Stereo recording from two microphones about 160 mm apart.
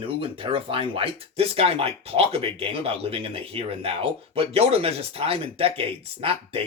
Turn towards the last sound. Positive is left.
turn(degrees=-35)  # may be behind; listen again after turning